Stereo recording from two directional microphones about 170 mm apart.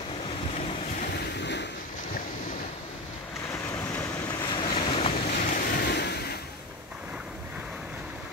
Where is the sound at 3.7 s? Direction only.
10° left (ahead or behind).